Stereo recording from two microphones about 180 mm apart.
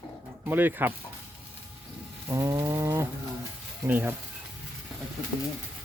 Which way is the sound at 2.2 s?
15° right (ahead or behind).